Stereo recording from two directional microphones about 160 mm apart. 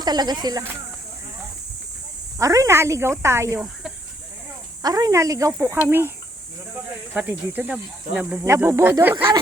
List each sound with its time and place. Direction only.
0.0 s speech: 25° right (ahead or behind)
2.4 s speech: 20° right (ahead or behind)
4.8 s speech: 25° right (ahead or behind)
7.1 s speech: 10° right (ahead or behind)